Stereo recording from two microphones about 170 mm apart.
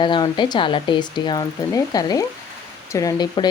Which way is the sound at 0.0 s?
30° left (ahead or behind).